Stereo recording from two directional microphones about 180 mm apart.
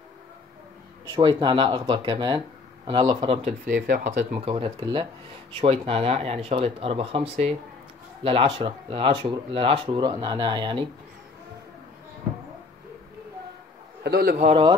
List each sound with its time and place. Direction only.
1.1 s speech: 25° right (ahead or behind)
3.6 s speech: 55° right (ahead or behind)
4.2 s speech: 35° right (ahead or behind)
14.0 s a man's voice: 60° right (ahead or behind)
14.3 s speech: 35° right (ahead or behind)